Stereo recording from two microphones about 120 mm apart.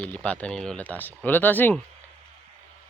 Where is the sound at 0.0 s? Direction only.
10° left (ahead or behind).